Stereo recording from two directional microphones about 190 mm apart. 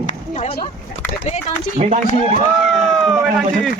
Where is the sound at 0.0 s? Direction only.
35° left (ahead or behind).